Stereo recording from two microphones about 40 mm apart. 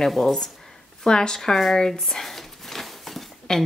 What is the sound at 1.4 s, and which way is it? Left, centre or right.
Speech, centre.